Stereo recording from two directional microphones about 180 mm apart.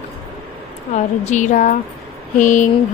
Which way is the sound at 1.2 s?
40° left (ahead or behind).